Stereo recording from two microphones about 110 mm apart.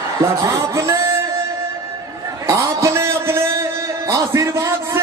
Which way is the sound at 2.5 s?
25° right (ahead or behind).